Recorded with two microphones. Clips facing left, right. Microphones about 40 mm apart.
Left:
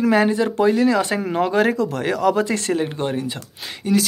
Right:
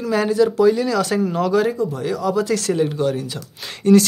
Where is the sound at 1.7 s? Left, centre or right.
Left.